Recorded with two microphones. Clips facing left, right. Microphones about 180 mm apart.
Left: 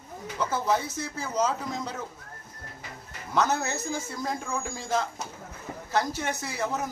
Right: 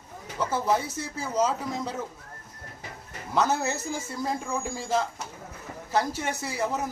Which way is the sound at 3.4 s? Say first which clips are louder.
Right 1 dB; 30° right (ahead or behind).